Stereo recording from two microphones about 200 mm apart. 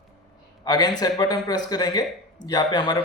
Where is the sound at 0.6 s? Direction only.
20° left (ahead or behind).